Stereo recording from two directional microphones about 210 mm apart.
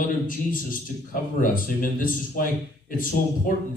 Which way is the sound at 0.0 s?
40° left (ahead or behind).